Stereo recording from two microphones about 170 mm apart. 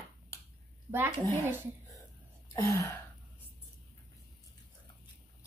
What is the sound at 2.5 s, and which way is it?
Gasp, 20° left (ahead or behind).